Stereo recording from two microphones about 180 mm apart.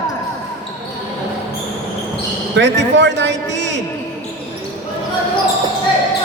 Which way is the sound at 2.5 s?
80° right.